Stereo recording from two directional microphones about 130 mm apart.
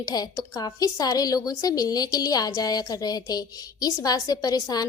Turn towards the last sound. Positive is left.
turn(degrees=30)  # may be behind; listen again after turning